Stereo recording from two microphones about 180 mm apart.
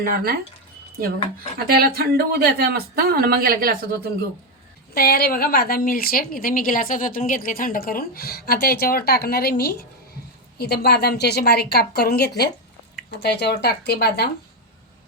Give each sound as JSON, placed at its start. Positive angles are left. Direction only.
{"t": 0.0, "sound": "speech", "side_deg": -55}
{"t": 1.5, "sound": "speech", "side_deg": -60}
{"t": 4.9, "sound": "a woman's voice", "side_deg": 60}